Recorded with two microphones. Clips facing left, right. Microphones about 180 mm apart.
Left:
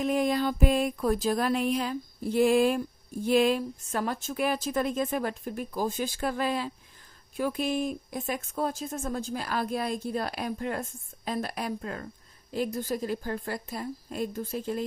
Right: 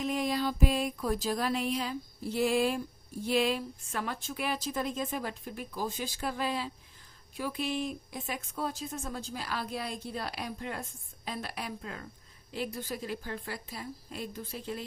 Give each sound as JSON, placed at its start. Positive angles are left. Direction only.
{"t": 0.0, "sound": "a woman's voice", "side_deg": 50}